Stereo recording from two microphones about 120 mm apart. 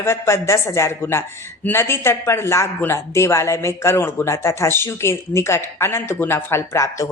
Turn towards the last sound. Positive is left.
turn(degrees=25)  # may be behind; listen again after turning